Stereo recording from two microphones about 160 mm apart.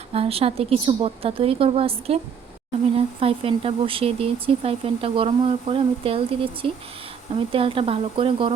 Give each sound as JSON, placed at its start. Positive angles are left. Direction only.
{"t": 0.1, "sound": "speech", "side_deg": -35}